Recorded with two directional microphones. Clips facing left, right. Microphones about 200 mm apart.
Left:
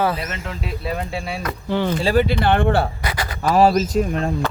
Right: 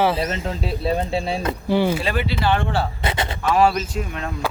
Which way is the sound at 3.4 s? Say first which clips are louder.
Left 3 dB; 40° left (ahead or behind).